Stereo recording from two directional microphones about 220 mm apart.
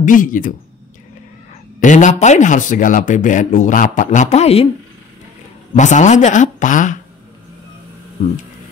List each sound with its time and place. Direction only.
0.0 s speech: 35° left (ahead or behind)
1.8 s speech: 35° left (ahead or behind)
5.8 s speech: 35° left (ahead or behind)